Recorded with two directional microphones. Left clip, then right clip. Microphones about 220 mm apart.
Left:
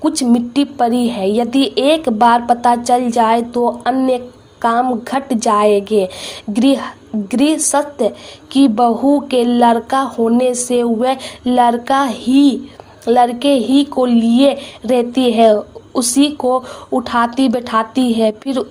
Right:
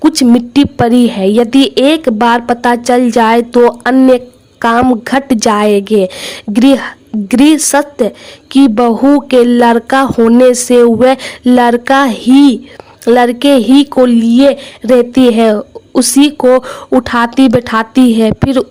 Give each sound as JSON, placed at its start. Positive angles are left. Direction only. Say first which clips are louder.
{"t": 0.0, "sound": "speech", "louder": "right 7 dB", "side_deg": -50}